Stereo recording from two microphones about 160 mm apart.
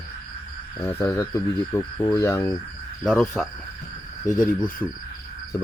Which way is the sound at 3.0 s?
5° left (ahead or behind).